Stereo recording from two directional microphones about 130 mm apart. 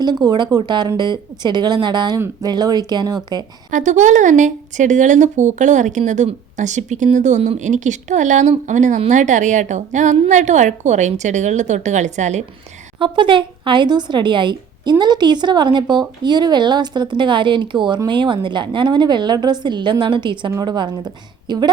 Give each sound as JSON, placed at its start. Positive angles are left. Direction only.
{"t": 0.0, "sound": "a woman's voice", "side_deg": -30}
{"t": 3.7, "sound": "a woman's voice", "side_deg": -75}
{"t": 13.0, "sound": "a woman's voice", "side_deg": -40}